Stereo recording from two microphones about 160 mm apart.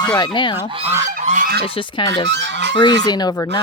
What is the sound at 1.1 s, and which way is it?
Goose, 55° right (ahead or behind).